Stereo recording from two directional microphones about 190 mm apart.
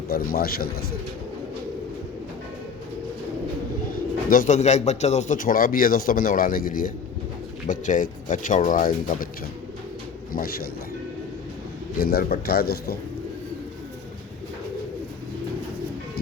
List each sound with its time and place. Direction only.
0.1 s a man's voice: 55° left (ahead or behind)
4.3 s a man's voice: 45° left (ahead or behind)
11.9 s a man's voice: 50° left (ahead or behind)